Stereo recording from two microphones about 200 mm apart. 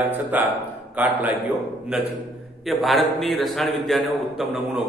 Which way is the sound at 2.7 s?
Centre (ahead or behind).